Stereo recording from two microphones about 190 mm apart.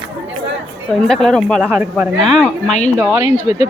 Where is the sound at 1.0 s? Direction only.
Centre (ahead or behind).